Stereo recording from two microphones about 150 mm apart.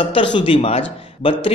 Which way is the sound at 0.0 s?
35° left (ahead or behind).